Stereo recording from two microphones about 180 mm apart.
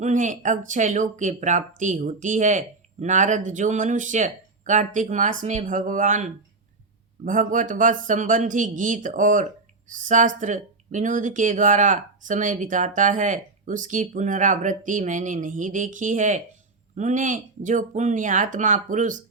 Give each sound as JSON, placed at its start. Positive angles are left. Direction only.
{"t": 0.0, "sound": "speech", "side_deg": -45}